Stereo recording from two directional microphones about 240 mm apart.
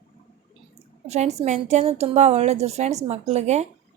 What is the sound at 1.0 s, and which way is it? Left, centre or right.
A woman's voice, right.